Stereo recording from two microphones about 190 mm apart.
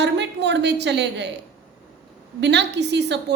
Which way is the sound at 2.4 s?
65° right (ahead or behind).